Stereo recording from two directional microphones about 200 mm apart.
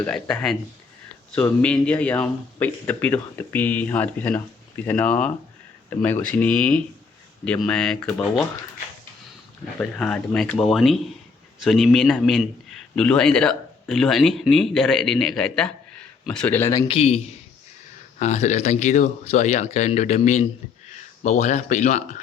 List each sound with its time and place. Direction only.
0.0 s a man's voice: 5° left (ahead or behind)
9.7 s a man's voice: 5° left (ahead or behind)
16.9 s speech: 30° left (ahead or behind)
18.2 s speech: 35° left (ahead or behind)